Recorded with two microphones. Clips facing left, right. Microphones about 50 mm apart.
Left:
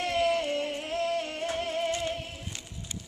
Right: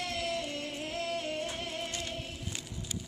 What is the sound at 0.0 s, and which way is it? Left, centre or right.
Music, left.